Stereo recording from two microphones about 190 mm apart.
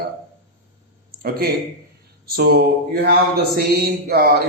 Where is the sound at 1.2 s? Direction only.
50° right (ahead or behind).